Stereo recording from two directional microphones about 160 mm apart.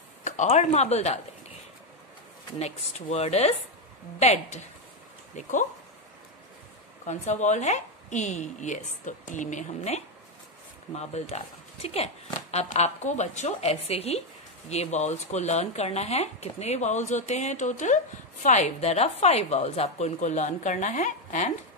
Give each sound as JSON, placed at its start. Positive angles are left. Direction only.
{"t": 0.2, "sound": "speech", "side_deg": 45}
{"t": 2.6, "sound": "speech", "side_deg": 40}
{"t": 7.1, "sound": "speech", "side_deg": 45}
{"t": 12.4, "sound": "a sound", "side_deg": 40}
{"t": 12.6, "sound": "speech", "side_deg": 45}